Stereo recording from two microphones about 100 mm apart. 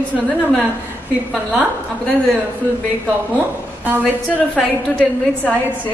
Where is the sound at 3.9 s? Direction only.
15° right (ahead or behind).